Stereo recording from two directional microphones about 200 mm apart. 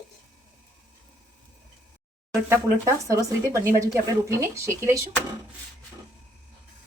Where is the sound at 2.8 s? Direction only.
15° right (ahead or behind).